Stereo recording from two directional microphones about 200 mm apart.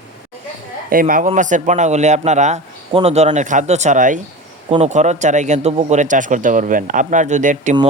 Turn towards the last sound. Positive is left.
turn(degrees=-35)  # may be behind; listen again after turning